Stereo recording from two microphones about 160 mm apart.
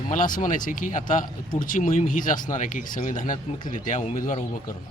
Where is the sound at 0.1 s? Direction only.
55° left (ahead or behind).